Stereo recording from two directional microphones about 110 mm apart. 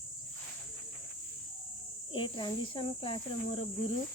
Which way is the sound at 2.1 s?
45° left (ahead or behind).